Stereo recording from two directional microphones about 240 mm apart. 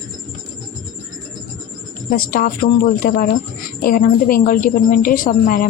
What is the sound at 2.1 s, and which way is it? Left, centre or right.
A woman's voice, left.